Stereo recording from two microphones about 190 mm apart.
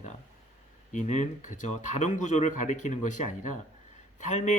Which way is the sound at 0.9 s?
40° left (ahead or behind).